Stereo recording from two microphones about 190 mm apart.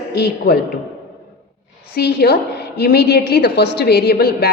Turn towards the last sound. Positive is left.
turn(degrees=55)  # may be behind; listen again after turning